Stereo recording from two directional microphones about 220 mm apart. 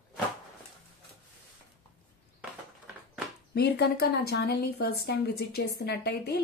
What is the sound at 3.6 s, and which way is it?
Speech, 50° left (ahead or behind).